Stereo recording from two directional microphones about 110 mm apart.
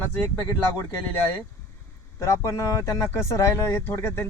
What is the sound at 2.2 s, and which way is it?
Speech, 25° left (ahead or behind).